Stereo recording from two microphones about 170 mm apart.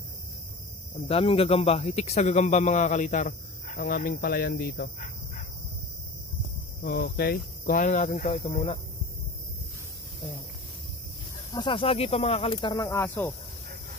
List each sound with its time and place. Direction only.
1.0 s speech: 35° left (ahead or behind); by 5.4 s 50° left (ahead or behind)
6.8 s speech: 65° left (ahead or behind); by 8.3 s 45° left (ahead or behind)
11.5 s speech: 30° left (ahead or behind)
12.8 s speech: 15° left (ahead or behind)